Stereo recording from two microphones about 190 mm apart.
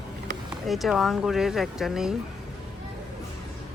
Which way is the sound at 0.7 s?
Centre (ahead or behind).